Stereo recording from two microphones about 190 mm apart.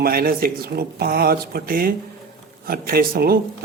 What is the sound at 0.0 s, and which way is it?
Speech, 50° right (ahead or behind).